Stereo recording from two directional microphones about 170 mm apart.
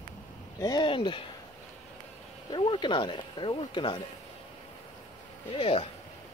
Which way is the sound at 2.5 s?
25° left (ahead or behind).